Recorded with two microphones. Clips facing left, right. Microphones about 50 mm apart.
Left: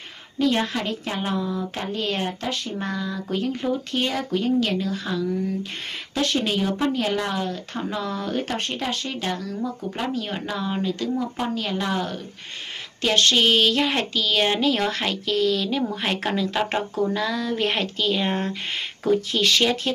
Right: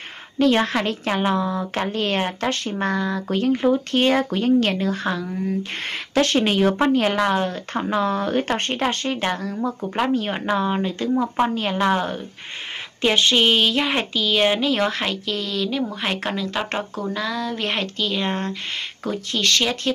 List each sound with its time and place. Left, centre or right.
0.4 s speech: right
2.0 s speech: right
9.8 s speech: right
10.1 s speech: right
13.0 s a sound: centre